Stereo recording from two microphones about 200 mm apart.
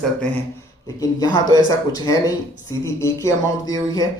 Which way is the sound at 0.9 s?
15° left (ahead or behind).